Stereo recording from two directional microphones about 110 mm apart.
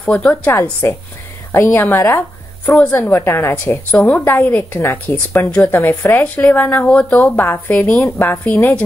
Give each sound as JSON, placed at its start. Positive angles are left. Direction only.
{"t": 0.0, "sound": "a woman's voice", "side_deg": 5}
{"t": 0.8, "sound": "a woman's voice", "side_deg": 20}